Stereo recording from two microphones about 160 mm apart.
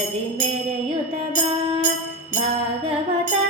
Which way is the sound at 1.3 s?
45° right (ahead or behind).